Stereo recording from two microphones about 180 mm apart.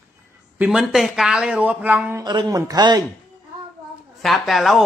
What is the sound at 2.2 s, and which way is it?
Speech, 25° right (ahead or behind).